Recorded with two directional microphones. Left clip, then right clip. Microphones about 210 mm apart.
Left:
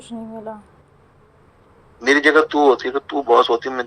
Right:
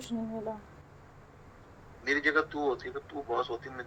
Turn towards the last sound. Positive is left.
turn(degrees=40)  # may be behind; listen again after turning